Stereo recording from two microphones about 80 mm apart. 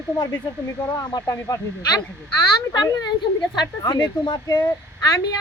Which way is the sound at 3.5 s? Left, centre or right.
Left.